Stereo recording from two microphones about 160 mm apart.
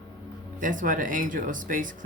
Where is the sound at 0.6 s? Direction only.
55° right (ahead or behind).